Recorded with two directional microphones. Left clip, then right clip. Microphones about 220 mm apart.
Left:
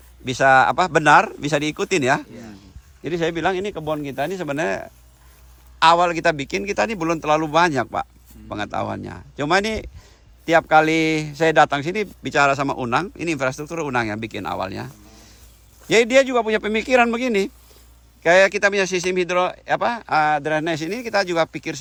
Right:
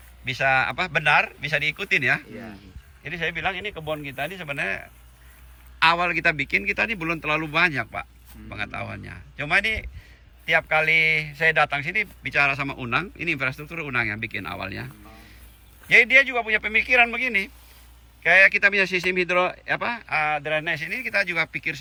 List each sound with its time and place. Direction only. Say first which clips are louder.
0.3 s a man's voice: left 7 dB; 15° left (ahead or behind)
3.8 s speech: left 3 dB; 65° left (ahead or behind)
4.3 s a man's voice: left 4 dB; 20° left (ahead or behind)